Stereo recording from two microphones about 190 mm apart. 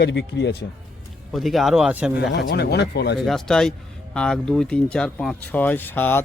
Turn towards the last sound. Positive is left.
turn(degrees=10)  # may be behind; listen again after turning